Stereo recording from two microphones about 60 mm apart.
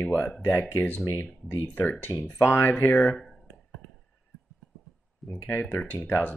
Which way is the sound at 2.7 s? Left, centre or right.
Left.